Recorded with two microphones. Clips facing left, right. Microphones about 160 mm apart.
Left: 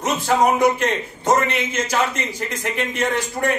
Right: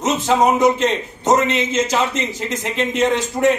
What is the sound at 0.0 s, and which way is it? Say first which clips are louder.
A man's voice: right 2 dB; 20° right (ahead or behind).